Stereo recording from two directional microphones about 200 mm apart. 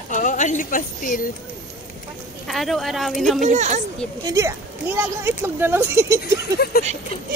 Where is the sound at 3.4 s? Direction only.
35° right (ahead or behind).